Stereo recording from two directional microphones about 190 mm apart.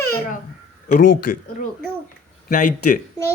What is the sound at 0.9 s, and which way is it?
Speech, 50° left (ahead or behind).